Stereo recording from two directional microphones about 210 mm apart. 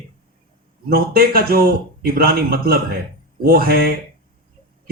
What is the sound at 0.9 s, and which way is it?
Speech, 45° right (ahead or behind).